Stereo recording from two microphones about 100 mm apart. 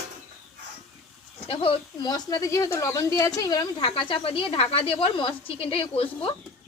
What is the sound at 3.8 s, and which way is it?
Speech, 60° left (ahead or behind).